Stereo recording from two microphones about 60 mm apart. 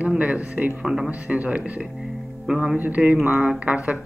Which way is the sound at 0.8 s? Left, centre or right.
Centre.